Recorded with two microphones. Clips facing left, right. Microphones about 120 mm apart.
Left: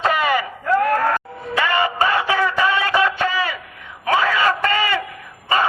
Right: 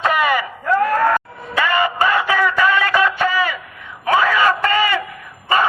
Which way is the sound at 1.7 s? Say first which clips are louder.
Right 2 dB; 25° left (ahead or behind).